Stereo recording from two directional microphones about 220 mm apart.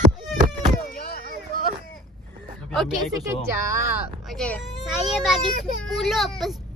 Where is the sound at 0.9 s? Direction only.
45° left (ahead or behind).